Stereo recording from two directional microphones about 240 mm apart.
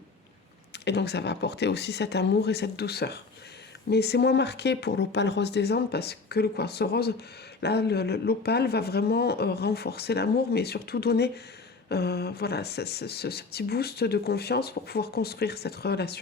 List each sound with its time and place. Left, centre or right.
0.7 s speech: left